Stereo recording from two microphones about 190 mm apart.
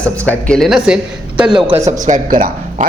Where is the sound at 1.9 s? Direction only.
40° right (ahead or behind).